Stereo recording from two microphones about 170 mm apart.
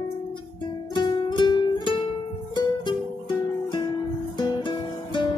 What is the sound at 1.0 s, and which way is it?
Music, 25° left (ahead or behind).